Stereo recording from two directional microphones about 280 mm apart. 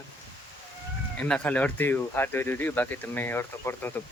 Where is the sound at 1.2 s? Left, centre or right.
Centre.